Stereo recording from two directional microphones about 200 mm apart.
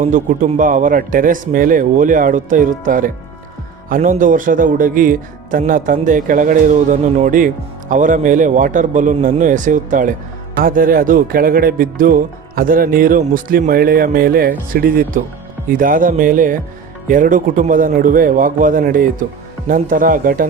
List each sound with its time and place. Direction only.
0.0 s speech: 35° right (ahead or behind)